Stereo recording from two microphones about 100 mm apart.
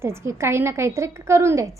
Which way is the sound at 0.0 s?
25° right (ahead or behind).